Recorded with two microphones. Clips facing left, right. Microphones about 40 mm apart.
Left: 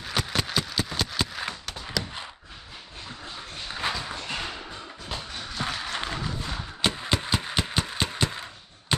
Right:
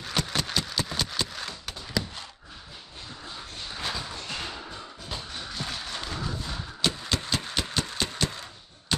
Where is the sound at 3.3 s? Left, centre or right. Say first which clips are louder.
Left 3 dB; centre.